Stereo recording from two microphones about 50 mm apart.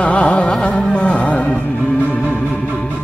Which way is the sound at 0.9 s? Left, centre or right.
Left.